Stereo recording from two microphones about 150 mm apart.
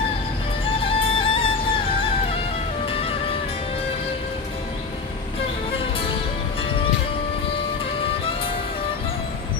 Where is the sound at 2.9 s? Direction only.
40° left (ahead or behind).